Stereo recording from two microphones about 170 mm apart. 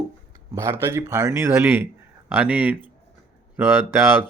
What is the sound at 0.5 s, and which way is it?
A man's voice, 15° right (ahead or behind).